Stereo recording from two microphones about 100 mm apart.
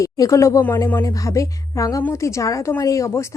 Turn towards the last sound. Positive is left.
turn(degrees=30)  # may be behind; listen again after turning